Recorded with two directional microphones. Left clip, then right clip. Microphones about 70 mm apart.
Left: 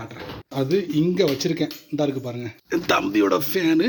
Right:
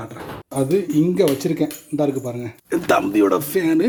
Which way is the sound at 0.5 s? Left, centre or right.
Centre.